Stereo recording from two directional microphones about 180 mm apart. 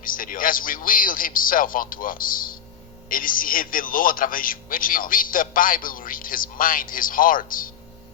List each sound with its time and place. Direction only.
0.0 s a man's voice: 50° left (ahead or behind)